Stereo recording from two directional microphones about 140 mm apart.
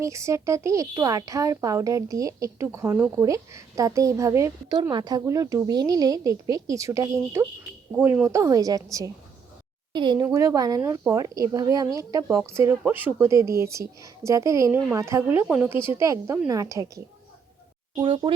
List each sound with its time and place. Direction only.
0.0 s speech: 20° right (ahead or behind)
4.8 s speech: 30° right (ahead or behind)